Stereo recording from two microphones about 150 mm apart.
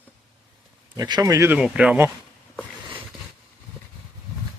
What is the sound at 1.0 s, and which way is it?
Speech, 25° right (ahead or behind).